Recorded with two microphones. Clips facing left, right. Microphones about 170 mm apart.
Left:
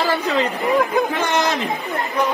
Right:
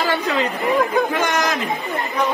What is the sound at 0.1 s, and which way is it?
Speech, 35° left (ahead or behind).